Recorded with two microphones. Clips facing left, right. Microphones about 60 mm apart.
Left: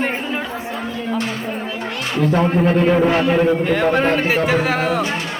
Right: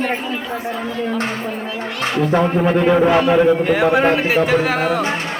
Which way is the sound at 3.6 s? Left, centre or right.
Centre.